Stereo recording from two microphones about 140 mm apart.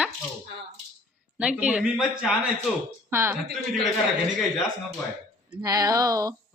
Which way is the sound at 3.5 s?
Centre (ahead or behind).